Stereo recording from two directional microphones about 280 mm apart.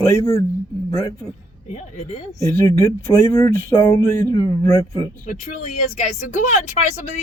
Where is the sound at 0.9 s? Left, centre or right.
Centre.